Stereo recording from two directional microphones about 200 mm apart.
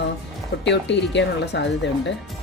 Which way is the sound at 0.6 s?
60° left (ahead or behind).